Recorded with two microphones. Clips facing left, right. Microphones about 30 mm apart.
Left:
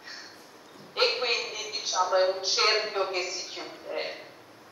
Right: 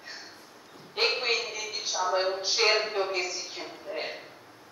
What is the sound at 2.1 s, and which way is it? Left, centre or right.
Speech, centre.